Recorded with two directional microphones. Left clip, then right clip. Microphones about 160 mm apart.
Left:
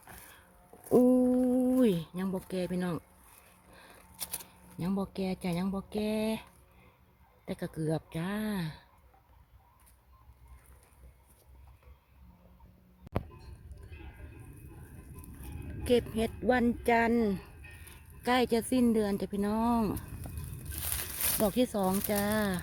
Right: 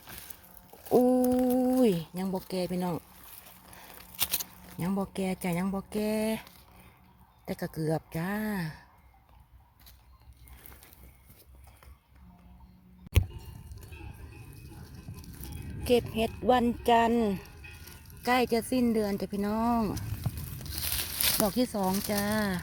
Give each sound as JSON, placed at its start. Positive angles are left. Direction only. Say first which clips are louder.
{"t": 0.9, "sound": "a sound", "louder": "right 1 dB", "side_deg": 25}
{"t": 1.3, "sound": "a sound", "louder": "right 2 dB", "side_deg": 5}
{"t": 4.8, "sound": "speech", "louder": "right 2 dB", "side_deg": -5}
{"t": 15.8, "sound": "speech", "louder": "right 2 dB", "side_deg": 5}
{"t": 19.8, "sound": "speech", "louder": "right 1 dB", "side_deg": 10}
{"t": 21.4, "sound": "speech", "louder": "left 3 dB", "side_deg": 20}